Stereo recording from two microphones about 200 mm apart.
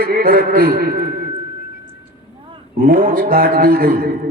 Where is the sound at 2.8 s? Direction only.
45° right (ahead or behind).